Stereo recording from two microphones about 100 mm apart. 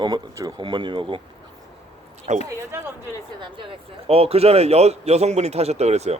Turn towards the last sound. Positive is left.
turn(degrees=-90)